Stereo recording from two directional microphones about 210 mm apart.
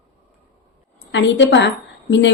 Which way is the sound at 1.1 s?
60° left (ahead or behind).